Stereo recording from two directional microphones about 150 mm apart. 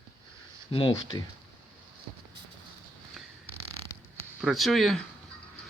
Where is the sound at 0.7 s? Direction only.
35° left (ahead or behind).